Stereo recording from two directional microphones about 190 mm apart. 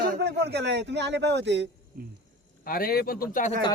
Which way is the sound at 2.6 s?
50° left (ahead or behind).